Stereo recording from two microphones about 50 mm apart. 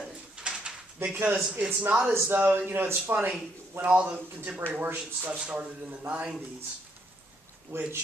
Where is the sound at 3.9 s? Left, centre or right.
Right.